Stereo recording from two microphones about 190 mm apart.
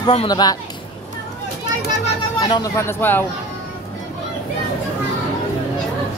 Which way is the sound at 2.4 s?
20° left (ahead or behind).